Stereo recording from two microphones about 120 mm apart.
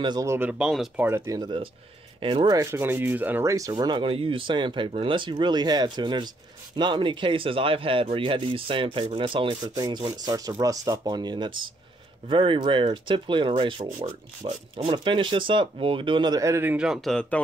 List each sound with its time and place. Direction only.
0.2 s speech: 25° right (ahead or behind)
0.5 s sanding: 5° right (ahead or behind)
1.0 s speech: 25° right (ahead or behind)
2.1 s speech: 45° right (ahead or behind)
2.5 s sanding: 20° right (ahead or behind)
3.4 s speech: 25° right (ahead or behind)
16.7 s speech: 5° right (ahead or behind)